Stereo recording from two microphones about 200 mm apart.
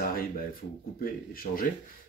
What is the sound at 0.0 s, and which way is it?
Speech, 45° left (ahead or behind).